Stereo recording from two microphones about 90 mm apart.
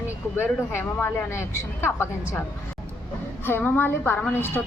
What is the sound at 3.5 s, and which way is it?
Speech, 20° left (ahead or behind).